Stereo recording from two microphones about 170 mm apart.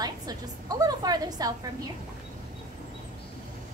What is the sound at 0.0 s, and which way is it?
A woman's voice, 20° right (ahead or behind).